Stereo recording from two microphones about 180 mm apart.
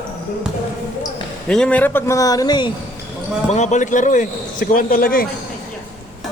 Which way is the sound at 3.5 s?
40° left (ahead or behind).